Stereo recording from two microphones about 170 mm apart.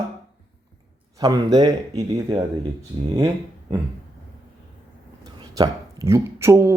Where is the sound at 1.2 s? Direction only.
25° right (ahead or behind).